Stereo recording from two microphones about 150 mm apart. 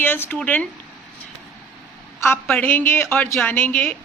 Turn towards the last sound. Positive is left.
turn(degrees=10)  # may be behind; listen again after turning